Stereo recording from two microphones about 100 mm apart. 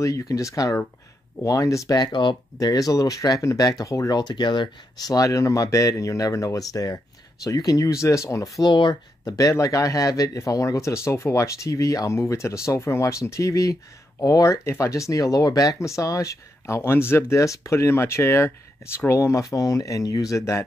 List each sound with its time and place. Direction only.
0.0 s speech: 35° left (ahead or behind)
8.6 s speech: 50° left (ahead or behind)
9.4 s speech: 35° left (ahead or behind)